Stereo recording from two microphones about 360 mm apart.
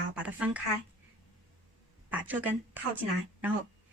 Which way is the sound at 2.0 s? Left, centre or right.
Centre.